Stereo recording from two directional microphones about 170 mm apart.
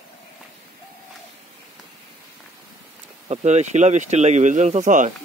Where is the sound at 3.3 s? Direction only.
40° right (ahead or behind).